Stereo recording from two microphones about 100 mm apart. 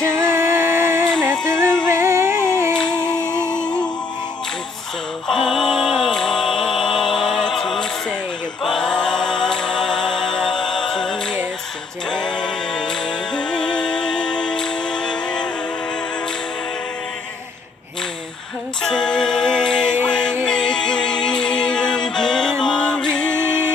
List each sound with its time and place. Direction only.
0.0 s music: 25° right (ahead or behind)
1.9 s a sound: 25° right (ahead or behind)
3.6 s music: 10° left (ahead or behind)
5.3 s a sound: 5° left (ahead or behind)
8.6 s a capella: 5° left (ahead or behind)
12.1 s music: 10° left (ahead or behind)
18.8 s music: 5° left (ahead or behind)